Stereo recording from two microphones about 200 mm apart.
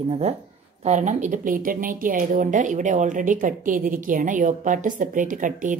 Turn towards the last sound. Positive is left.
turn(degrees=-40)  # may be behind; listen again after turning